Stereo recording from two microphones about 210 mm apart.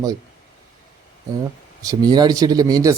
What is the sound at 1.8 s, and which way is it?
A man's voice, 20° right (ahead or behind).